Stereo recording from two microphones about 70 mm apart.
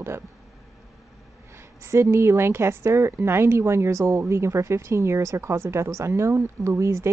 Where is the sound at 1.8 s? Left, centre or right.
Right.